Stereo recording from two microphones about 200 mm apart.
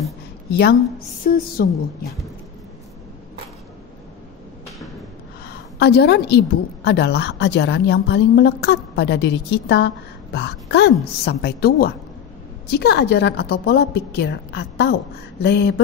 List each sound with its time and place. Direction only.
1.2 s a woman's voice: 45° left (ahead or behind)
5.8 s a woman's voice: 55° left (ahead or behind)